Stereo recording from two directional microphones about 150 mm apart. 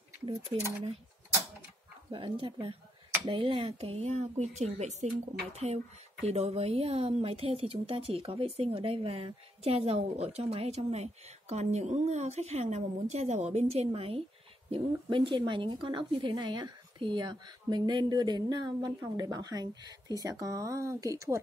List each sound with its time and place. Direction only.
0.2 s speech: 35° right (ahead or behind)
2.0 s a woman's voice: 35° right (ahead or behind)